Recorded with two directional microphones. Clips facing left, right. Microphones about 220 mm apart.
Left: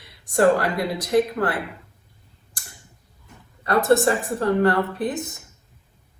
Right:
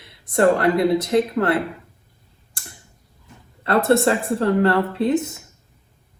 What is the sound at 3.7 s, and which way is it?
Speech, 25° right (ahead or behind).